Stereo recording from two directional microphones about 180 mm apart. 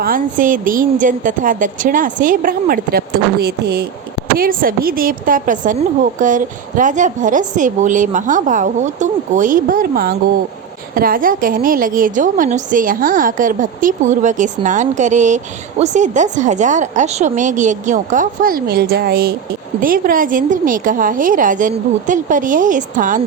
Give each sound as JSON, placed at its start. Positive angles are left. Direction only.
{"t": 0.0, "sound": "a woman's voice", "side_deg": -50}